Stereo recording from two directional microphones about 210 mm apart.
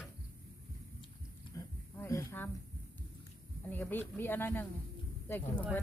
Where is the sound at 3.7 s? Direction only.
10° left (ahead or behind).